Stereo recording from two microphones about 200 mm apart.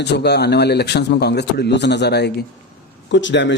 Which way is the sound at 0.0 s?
55° left (ahead or behind).